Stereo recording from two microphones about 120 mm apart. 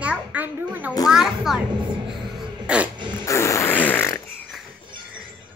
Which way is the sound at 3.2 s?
25° left (ahead or behind).